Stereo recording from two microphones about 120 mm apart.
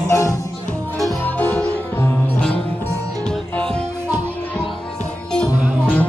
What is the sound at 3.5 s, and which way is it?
Music, 10° left (ahead or behind).